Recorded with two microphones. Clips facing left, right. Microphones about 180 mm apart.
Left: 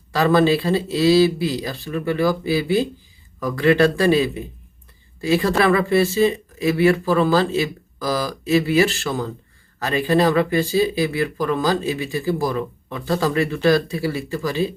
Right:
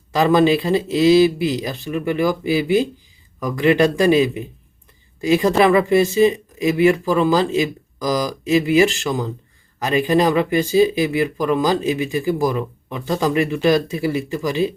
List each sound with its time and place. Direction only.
0.1 s speech: 20° right (ahead or behind)